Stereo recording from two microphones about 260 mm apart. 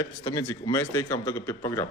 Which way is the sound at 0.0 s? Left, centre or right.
Centre.